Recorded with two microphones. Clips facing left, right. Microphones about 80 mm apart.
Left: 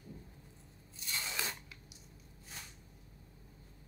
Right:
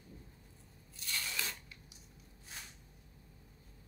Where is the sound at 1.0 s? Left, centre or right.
Left.